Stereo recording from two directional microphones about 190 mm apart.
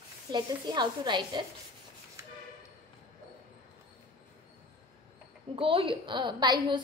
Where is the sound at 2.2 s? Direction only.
15° right (ahead or behind).